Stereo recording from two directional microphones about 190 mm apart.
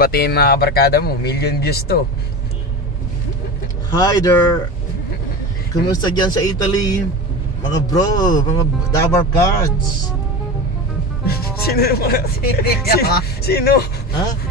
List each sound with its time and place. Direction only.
0.0 s speech: 55° left (ahead or behind)
3.9 s speech: 20° left (ahead or behind)
5.9 s speech: 20° left (ahead or behind)
7.9 s speech: 20° left (ahead or behind)
11.2 s speech: 55° left (ahead or behind)